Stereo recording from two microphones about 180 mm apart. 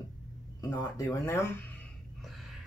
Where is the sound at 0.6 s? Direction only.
20° left (ahead or behind).